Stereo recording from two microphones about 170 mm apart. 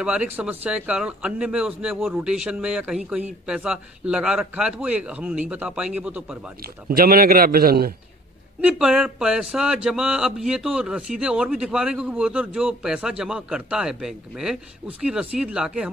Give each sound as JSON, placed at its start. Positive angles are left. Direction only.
{"t": 0.0, "sound": "a man's voice", "side_deg": -5}
{"t": 6.6, "sound": "a man's voice", "side_deg": -60}
{"t": 8.5, "sound": "a man's voice", "side_deg": -5}